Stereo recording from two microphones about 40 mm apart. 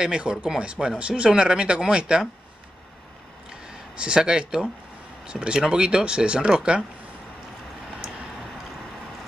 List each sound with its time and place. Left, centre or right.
0.0 s speech: right
3.4 s a sound: right
5.2 s speech: right